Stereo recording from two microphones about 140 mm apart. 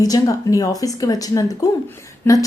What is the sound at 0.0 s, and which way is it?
A woman's voice, 25° left (ahead or behind).